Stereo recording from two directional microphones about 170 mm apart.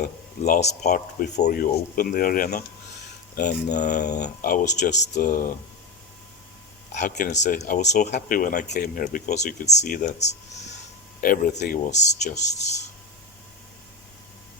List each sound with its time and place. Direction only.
0.4 s speech: 45° left (ahead or behind)
1.6 s speech: 60° left (ahead or behind)
4.0 s speech: 75° left (ahead or behind); by 5.5 s 50° left (ahead or behind)
6.9 s speech: 45° left (ahead or behind)
8.6 s speech: 70° left (ahead or behind); by 10.0 s 50° left (ahead or behind)
11.2 s speech: 55° left (ahead or behind)
11.5 s speech: 70° left (ahead or behind)
11.9 s speech: 45° left (ahead or behind)